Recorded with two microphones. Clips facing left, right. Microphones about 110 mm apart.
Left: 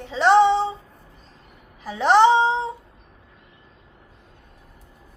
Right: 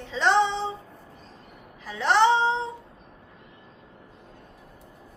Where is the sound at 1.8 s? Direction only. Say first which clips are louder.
Left 5 dB; 15° left (ahead or behind).